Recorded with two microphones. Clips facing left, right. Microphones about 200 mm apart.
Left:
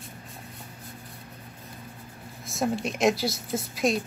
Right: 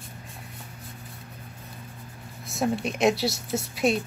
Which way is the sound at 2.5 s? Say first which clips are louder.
Right 1 dB; centre (ahead or behind).